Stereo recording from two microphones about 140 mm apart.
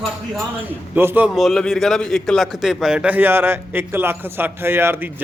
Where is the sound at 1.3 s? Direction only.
Centre (ahead or behind).